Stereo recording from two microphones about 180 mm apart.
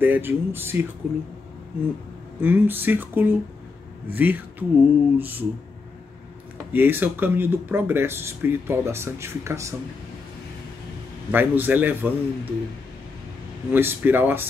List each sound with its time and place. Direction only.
0.0 s speech: 10° right (ahead or behind)
2.4 s speech: 10° right (ahead or behind)
6.7 s speech: 10° right (ahead or behind)
11.3 s speech: 10° right (ahead or behind)
13.7 s speech: 10° right (ahead or behind)